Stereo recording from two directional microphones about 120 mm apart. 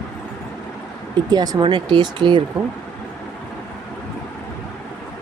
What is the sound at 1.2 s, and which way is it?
Speech, 35° right (ahead or behind).